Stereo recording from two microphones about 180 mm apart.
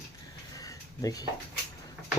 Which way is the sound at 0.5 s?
20° left (ahead or behind).